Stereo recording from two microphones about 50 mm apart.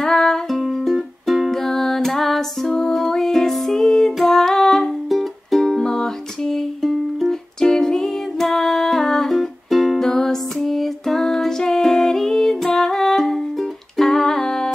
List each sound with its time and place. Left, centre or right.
0.0 s music: centre